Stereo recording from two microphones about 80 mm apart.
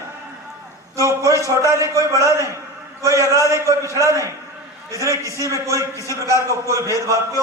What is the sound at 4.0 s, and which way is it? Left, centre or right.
Speech, left.